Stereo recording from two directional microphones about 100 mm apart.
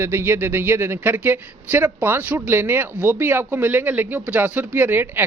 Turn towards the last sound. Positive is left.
turn(degrees=-20)  # may be behind; listen again after turning